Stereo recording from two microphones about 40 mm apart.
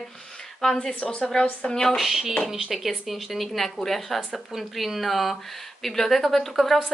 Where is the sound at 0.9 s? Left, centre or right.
Left.